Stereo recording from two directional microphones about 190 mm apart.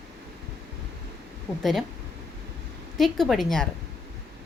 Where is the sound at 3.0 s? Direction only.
Centre (ahead or behind).